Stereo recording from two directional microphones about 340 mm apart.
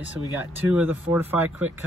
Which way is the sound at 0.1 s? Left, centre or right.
Centre.